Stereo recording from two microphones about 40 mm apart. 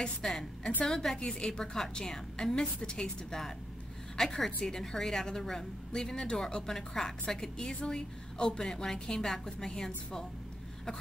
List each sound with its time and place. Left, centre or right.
0.0 s a woman's voice: centre